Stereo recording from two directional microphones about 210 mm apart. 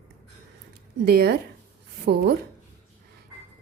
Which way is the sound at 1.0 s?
50° right (ahead or behind).